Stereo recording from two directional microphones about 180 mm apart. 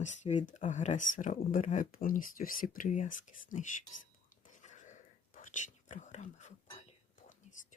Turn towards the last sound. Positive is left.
turn(degrees=40)  # may be behind; listen again after turning